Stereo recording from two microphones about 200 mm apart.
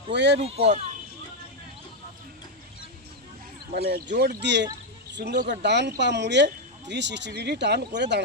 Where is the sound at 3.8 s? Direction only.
55° right (ahead or behind).